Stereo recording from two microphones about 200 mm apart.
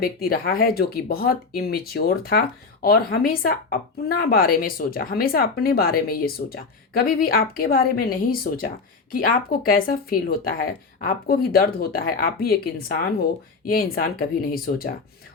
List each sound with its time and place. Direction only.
0.0 s a woman's voice: 50° left (ahead or behind)
13.7 s a woman's voice: 50° left (ahead or behind)